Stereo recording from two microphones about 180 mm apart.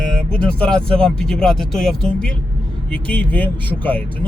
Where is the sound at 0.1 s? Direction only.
5° left (ahead or behind).